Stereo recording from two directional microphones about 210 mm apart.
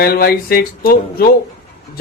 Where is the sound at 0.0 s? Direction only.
45° left (ahead or behind).